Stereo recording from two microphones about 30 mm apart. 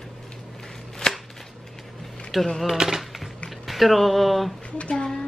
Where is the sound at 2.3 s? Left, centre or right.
Centre.